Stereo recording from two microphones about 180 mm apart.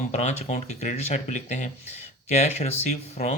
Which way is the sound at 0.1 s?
40° left (ahead or behind).